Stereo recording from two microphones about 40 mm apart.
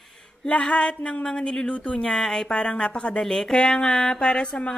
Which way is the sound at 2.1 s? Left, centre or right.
Centre.